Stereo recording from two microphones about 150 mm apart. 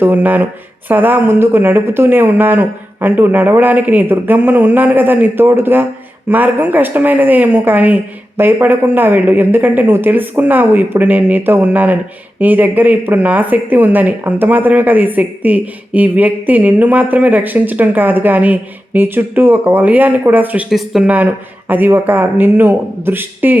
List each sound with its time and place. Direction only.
0.0 s speech: 10° right (ahead or behind)